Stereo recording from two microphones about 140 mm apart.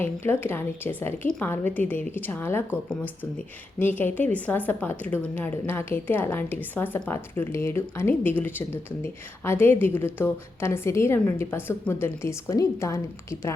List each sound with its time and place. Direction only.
0.3 s a woman's voice: 15° left (ahead or behind)